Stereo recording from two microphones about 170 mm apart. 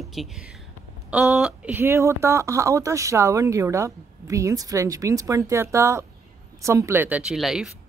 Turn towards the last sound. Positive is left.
turn(degrees=0)  # may be behind; listen again after turning